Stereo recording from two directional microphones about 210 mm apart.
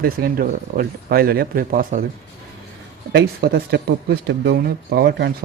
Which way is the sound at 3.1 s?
55° right (ahead or behind).